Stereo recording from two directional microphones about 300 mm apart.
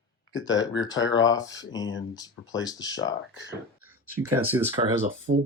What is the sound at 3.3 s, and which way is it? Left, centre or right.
Speech, left.